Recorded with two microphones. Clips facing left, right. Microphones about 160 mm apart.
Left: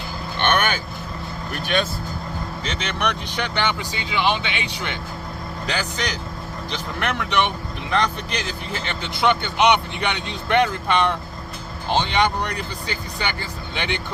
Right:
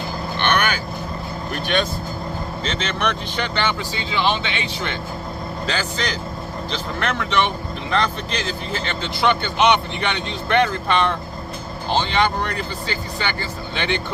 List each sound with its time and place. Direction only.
1.6 s speech: 5° left (ahead or behind)